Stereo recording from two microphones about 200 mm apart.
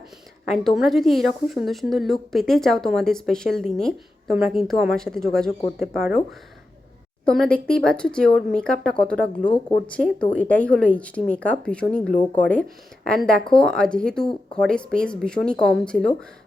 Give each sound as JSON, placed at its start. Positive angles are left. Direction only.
{"t": 0.5, "sound": "a woman's voice", "side_deg": 0}
{"t": 7.3, "sound": "a woman's voice", "side_deg": 5}